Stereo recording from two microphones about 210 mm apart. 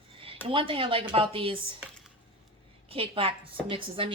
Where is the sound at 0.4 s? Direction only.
25° right (ahead or behind).